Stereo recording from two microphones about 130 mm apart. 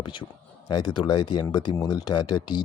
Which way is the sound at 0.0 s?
35° left (ahead or behind).